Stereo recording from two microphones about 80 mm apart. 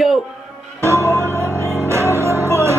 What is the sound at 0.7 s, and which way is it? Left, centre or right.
Music, right.